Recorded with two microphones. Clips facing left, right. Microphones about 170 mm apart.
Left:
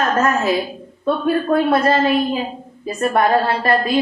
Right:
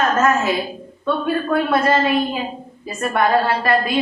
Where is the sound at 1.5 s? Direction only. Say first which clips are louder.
Left 1 dB; 35° left (ahead or behind).